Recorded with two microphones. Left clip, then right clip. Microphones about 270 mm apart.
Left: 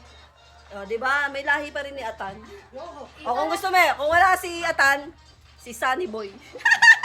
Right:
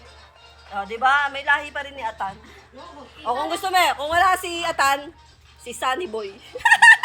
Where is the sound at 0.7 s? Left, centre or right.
Centre.